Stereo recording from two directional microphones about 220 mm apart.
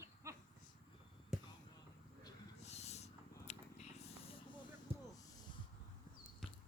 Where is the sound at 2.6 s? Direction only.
30° left (ahead or behind).